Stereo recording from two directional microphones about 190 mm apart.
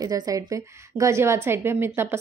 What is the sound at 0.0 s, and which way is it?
A woman's voice, 20° right (ahead or behind).